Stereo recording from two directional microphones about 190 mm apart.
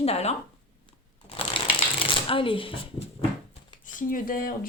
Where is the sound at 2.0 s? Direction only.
25° left (ahead or behind).